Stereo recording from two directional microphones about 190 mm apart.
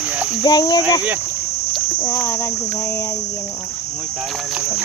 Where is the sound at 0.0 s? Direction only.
5° right (ahead or behind).